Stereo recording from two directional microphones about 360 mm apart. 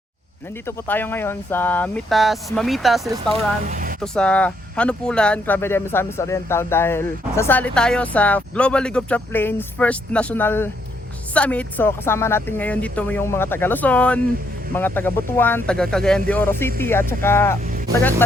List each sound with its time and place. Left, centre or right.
0.9 s speech: centre
3.7 s a sound: right
4.0 s speech: centre